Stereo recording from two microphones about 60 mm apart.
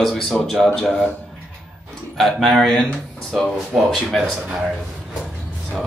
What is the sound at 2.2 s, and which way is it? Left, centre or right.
Speech, centre.